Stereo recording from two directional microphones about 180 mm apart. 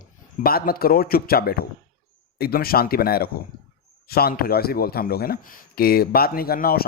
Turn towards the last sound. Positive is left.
turn(degrees=55)  # may be behind; listen again after turning